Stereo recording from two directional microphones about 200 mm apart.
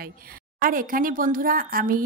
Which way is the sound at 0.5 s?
45° right (ahead or behind).